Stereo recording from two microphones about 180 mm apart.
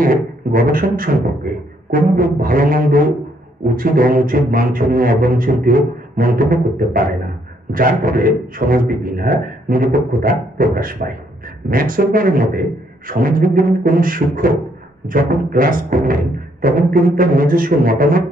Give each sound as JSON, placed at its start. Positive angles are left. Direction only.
{"t": 0.0, "sound": "music", "side_deg": -50}